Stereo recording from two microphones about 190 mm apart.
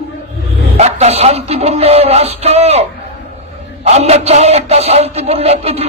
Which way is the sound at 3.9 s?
35° right (ahead or behind).